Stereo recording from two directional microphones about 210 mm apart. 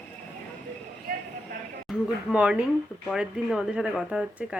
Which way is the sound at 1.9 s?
5° right (ahead or behind).